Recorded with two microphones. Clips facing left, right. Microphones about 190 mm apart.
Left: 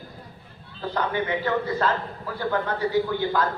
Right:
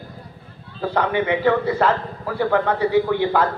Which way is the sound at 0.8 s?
80° right.